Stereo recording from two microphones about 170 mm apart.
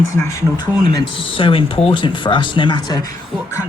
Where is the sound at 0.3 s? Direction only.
20° left (ahead or behind).